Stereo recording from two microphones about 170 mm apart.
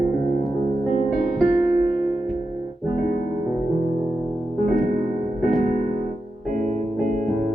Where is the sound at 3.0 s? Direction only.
60° left (ahead or behind).